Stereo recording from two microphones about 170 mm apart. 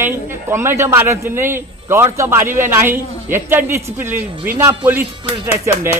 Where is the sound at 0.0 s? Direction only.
15° right (ahead or behind).